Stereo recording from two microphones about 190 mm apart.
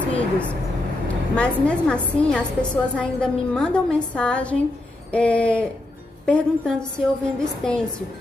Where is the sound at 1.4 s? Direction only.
5° left (ahead or behind).